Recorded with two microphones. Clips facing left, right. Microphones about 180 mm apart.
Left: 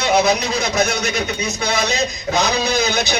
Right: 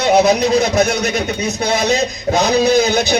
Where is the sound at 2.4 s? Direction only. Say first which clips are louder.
Right 6 dB; 55° right (ahead or behind).